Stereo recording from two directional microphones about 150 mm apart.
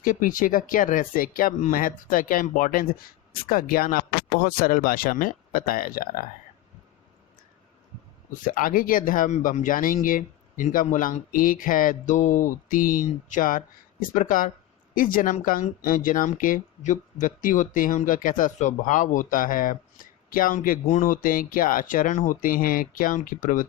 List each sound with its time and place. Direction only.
0.0 s speech: 65° left (ahead or behind)
8.4 s a man's voice: 70° left (ahead or behind)